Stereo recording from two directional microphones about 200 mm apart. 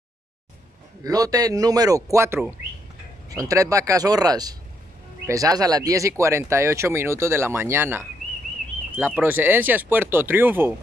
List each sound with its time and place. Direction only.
1.0 s speech: 20° right (ahead or behind)